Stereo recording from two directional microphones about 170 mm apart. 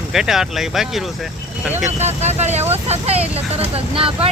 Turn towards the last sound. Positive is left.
turn(degrees=-35)  # may be behind; listen again after turning